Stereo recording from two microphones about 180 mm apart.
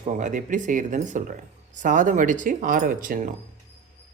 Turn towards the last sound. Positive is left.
turn(degrees=-50)  # may be behind; listen again after turning